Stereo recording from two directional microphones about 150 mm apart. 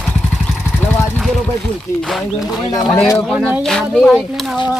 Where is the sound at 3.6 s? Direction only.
5° left (ahead or behind).